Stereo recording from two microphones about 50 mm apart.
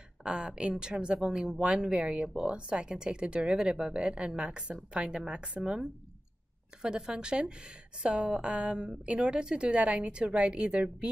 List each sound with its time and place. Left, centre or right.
0.2 s a woman's voice: centre